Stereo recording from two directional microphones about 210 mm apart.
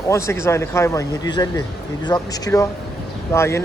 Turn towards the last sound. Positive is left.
turn(degrees=15)  # may be behind; listen again after turning